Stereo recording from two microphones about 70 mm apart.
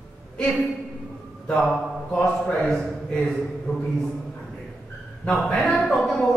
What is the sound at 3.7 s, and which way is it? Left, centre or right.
Speech, centre.